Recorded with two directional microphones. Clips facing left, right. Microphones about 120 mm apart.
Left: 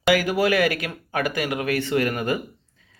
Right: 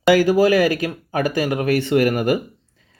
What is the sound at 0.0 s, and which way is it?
Speech, 35° right (ahead or behind).